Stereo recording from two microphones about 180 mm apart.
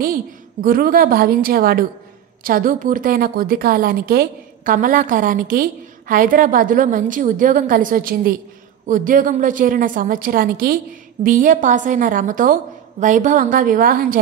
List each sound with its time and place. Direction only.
0.0 s a woman's voice: 50° right (ahead or behind)